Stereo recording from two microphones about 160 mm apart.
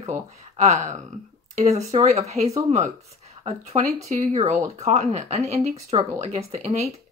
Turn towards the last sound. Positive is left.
turn(degrees=-40)  # may be behind; listen again after turning